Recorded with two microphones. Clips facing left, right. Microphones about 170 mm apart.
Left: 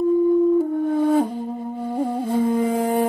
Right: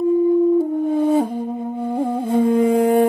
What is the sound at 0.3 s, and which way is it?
Music, 5° right (ahead or behind).